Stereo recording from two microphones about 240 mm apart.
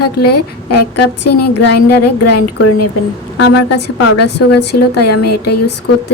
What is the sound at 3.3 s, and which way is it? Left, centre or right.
Speech, left.